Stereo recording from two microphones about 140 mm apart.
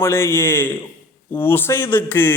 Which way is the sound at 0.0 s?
15° left (ahead or behind).